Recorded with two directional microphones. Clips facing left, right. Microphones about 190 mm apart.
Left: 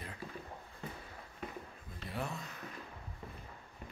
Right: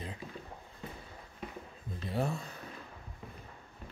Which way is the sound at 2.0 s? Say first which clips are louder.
Right 6 dB; 30° right (ahead or behind).